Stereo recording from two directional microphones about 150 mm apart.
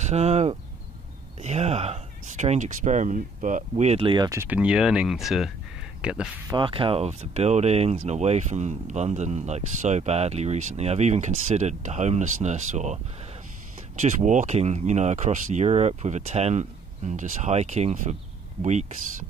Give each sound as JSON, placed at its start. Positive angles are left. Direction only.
{"t": 0.1, "sound": "speech", "side_deg": -45}
{"t": 4.3, "sound": "speech", "side_deg": -15}
{"t": 6.5, "sound": "speech", "side_deg": -35}